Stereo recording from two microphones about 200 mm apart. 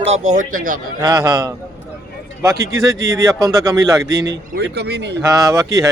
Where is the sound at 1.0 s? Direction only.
15° right (ahead or behind).